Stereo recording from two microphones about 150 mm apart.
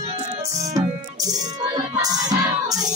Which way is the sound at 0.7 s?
25° right (ahead or behind).